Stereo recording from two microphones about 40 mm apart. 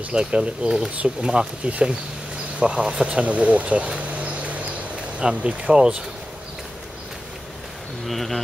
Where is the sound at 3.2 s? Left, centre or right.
Right.